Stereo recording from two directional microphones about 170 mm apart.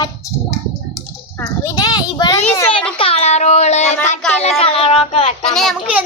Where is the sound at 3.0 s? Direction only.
35° left (ahead or behind).